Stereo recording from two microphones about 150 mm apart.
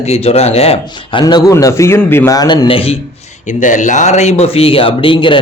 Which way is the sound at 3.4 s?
55° left (ahead or behind).